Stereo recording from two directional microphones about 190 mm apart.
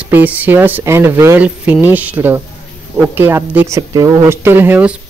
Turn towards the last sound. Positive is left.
turn(degrees=-10)  # may be behind; listen again after turning